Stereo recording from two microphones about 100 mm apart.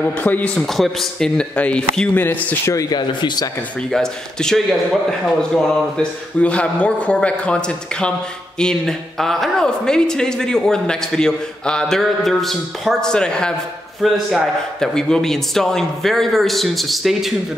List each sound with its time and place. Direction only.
0.0 s a man's voice: 15° left (ahead or behind)
0.7 s a man's voice: 5° left (ahead or behind)
2.1 s speech: 25° left (ahead or behind)
3.0 s speech: 50° left (ahead or behind)
3.9 s a man's voice: 5° left (ahead or behind)